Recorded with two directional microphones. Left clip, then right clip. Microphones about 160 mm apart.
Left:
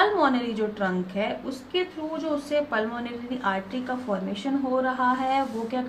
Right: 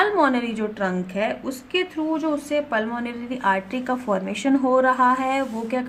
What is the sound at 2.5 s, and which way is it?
A woman's voice, 35° right (ahead or behind).